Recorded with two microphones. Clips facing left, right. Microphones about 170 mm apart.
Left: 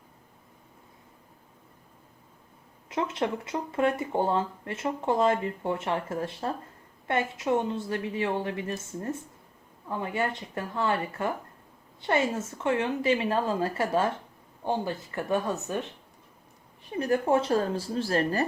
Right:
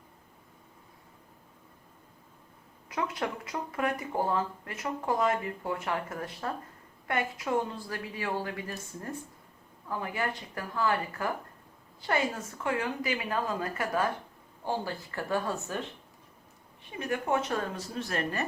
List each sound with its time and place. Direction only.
2.9 s speech: 25° left (ahead or behind)
17.0 s a woman's voice: 35° left (ahead or behind)